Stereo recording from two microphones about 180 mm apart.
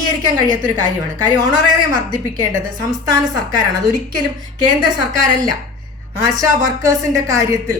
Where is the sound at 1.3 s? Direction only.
20° right (ahead or behind).